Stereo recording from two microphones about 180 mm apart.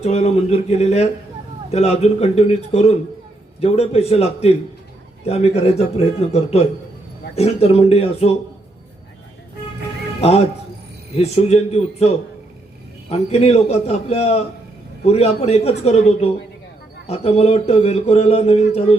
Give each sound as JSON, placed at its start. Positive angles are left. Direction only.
{"t": 0.0, "sound": "speech", "side_deg": 35}
{"t": 10.2, "sound": "speech", "side_deg": 35}